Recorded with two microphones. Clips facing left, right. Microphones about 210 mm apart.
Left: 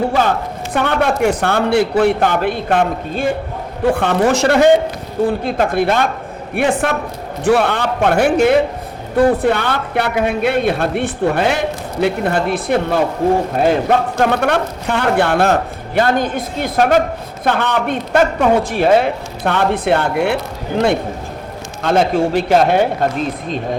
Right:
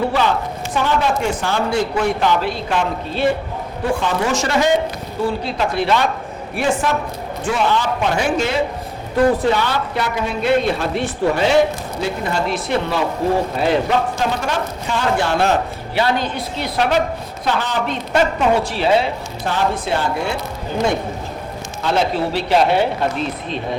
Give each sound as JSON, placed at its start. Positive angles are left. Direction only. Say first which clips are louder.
{"t": 0.1, "sound": "speech", "louder": "left 2 dB", "side_deg": 50}
{"t": 21.8, "sound": "speech", "louder": "left 4 dB", "side_deg": 50}